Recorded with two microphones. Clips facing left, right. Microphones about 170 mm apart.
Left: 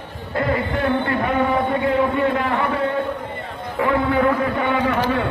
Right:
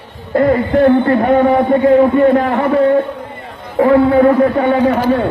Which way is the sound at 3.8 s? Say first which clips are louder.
Right 9 dB; 40° right (ahead or behind).